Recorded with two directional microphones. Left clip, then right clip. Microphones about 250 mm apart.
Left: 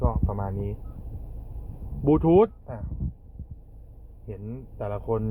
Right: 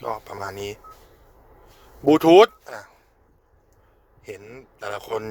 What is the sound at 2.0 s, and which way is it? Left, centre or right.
Speech, right.